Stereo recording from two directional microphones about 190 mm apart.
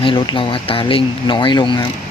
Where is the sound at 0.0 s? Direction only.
25° left (ahead or behind).